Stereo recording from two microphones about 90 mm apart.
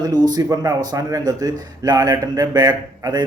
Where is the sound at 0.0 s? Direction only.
50° right (ahead or behind).